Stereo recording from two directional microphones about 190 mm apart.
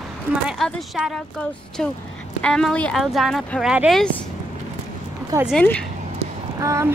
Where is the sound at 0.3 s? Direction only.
Centre (ahead or behind).